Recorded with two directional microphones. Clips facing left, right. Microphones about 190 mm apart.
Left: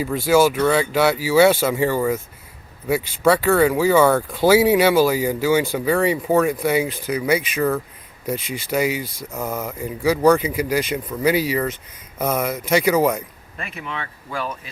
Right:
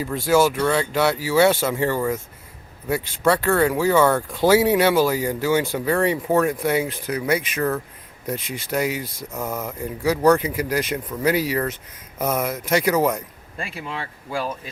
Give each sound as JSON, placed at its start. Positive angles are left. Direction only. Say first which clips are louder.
{"t": 0.0, "sound": "speech", "louder": "left 2 dB", "side_deg": 5}
{"t": 13.6, "sound": "speech", "louder": "even", "side_deg": -30}